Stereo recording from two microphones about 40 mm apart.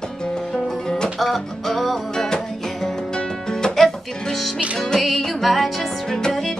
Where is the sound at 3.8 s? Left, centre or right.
Centre.